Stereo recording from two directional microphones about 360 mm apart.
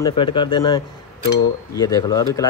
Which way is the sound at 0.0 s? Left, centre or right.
Centre.